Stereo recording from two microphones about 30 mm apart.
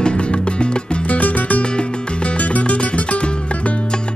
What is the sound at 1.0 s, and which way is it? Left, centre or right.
Music, left.